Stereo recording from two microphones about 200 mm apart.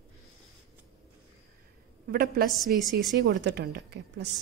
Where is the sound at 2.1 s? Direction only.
50° right (ahead or behind).